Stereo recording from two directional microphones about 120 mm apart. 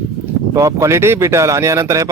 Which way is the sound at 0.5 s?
25° right (ahead or behind).